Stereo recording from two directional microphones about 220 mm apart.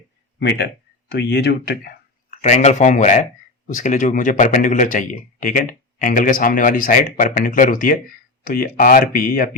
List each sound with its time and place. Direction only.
0.3 s speech: 50° left (ahead or behind)
2.3 s speech: 30° left (ahead or behind)